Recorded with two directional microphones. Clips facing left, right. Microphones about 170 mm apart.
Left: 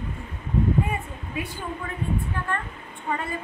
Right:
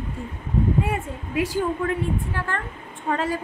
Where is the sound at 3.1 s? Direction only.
90° right.